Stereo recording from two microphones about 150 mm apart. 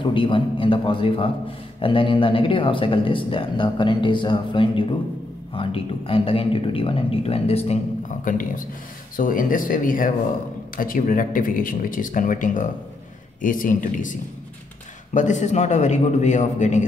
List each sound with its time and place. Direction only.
0.0 s speech: 35° left (ahead or behind)
8.2 s speech: 65° left (ahead or behind)
15.1 s a man's voice: 55° left (ahead or behind)